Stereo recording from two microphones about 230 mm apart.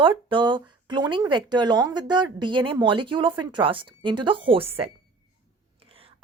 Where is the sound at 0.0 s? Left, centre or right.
Right.